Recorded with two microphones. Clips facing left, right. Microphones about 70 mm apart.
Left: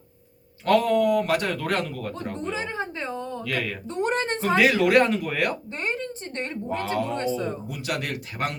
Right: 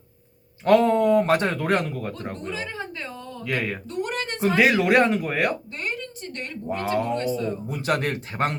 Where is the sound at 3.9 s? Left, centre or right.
Left.